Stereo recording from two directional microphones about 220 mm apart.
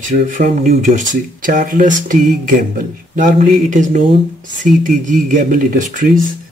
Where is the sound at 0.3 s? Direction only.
35° right (ahead or behind).